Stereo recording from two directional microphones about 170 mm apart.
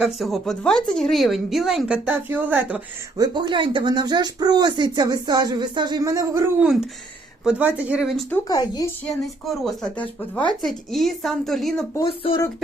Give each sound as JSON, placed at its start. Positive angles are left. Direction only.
{"t": 0.0, "sound": "speech", "side_deg": 0}
{"t": 3.2, "sound": "speech", "side_deg": -25}
{"t": 8.4, "sound": "a woman's voice", "side_deg": 25}
{"t": 9.2, "sound": "speech", "side_deg": 0}
{"t": 12.0, "sound": "speech", "side_deg": 30}